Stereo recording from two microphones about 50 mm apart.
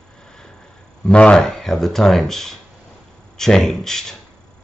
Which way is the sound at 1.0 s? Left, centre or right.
Centre.